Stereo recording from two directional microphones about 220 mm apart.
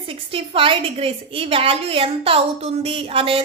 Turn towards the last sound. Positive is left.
turn(degrees=-25)  # may be behind; listen again after turning